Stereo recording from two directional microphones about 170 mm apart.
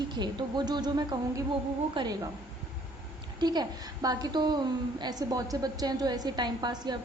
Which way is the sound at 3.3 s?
25° right (ahead or behind).